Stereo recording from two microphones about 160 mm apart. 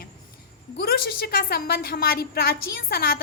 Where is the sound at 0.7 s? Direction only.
70° left (ahead or behind).